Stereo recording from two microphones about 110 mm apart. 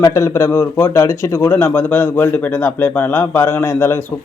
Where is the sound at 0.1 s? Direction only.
25° left (ahead or behind).